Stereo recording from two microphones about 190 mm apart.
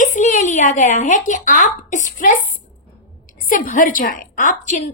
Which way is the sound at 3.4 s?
45° left (ahead or behind).